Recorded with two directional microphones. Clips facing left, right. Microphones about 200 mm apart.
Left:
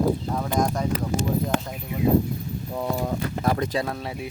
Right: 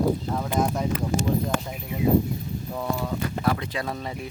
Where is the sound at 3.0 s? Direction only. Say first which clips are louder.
Left 2 dB; 45° left (ahead or behind).